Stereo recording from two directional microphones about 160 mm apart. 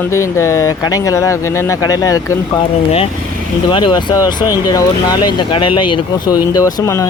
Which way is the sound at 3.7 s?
30° left (ahead or behind).